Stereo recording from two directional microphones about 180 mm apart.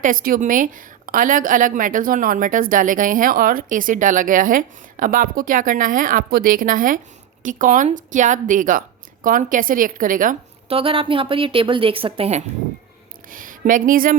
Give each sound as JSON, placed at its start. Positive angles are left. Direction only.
{"t": 0.0, "sound": "a woman's voice", "side_deg": -50}
{"t": 10.7, "sound": "a woman's voice", "side_deg": -30}
{"t": 13.3, "sound": "a woman's voice", "side_deg": -50}